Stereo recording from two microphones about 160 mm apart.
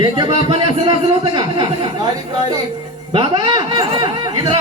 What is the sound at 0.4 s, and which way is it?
A man's voice, 35° right (ahead or behind).